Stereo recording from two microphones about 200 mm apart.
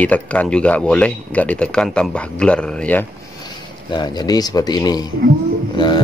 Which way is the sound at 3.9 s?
20° left (ahead or behind).